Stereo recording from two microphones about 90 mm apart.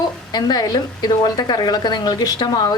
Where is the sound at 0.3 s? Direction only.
50° left (ahead or behind).